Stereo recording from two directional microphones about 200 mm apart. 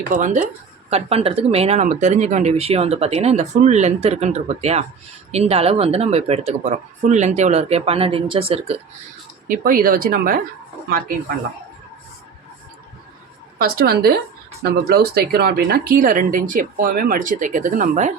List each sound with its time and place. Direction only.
0.1 s speech: 40° right (ahead or behind)
9.5 s speech: 45° right (ahead or behind)
13.6 s speech: 50° right (ahead or behind)